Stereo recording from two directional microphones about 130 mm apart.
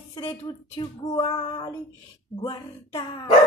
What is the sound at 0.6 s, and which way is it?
Female singing, 40° left (ahead or behind).